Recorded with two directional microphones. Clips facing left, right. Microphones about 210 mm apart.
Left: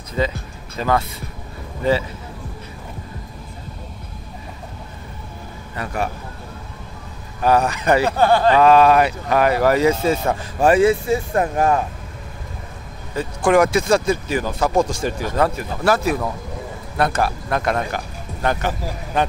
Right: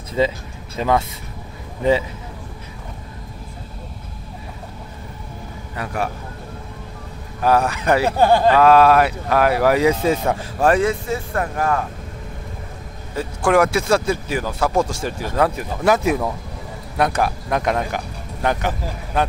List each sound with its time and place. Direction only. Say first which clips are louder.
0.2 s speech: right 3 dB; 20° right (ahead or behind)
7.4 s speech: even; 5° right (ahead or behind)
10.2 s speech: left 1 dB; 5° left (ahead or behind); by 11.8 s 20° left (ahead or behind)
13.4 s speech: left 1 dB; 5° right (ahead or behind)
15.8 s speech: right 1 dB; 20° right (ahead or behind)